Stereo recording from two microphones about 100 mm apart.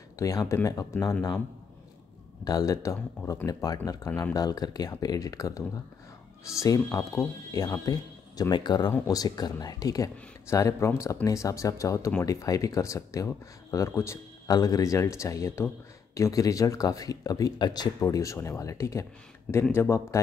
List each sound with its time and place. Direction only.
0.2 s speech: 35° left (ahead or behind)
2.4 s speech: 40° left (ahead or behind)
14.5 s speech: 40° left (ahead or behind)
18.0 s speech: 30° left (ahead or behind)